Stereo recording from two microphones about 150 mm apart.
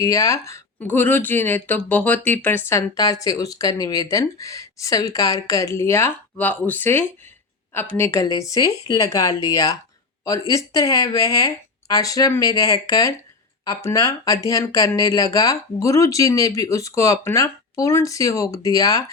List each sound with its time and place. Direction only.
0.0 s speech: 20° left (ahead or behind)